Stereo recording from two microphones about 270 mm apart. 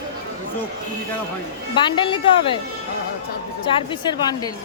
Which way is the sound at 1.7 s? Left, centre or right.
Centre.